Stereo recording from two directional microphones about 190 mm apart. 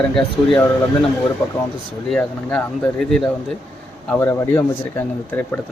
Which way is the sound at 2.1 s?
5° left (ahead or behind).